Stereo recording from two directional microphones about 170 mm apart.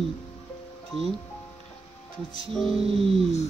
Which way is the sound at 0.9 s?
35° right (ahead or behind).